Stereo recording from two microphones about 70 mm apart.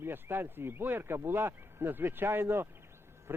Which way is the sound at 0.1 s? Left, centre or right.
Right.